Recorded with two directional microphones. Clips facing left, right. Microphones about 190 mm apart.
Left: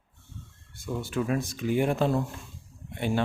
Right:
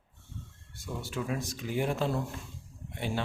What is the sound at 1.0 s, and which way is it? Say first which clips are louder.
A man's voice: left 6 dB; 55° left (ahead or behind).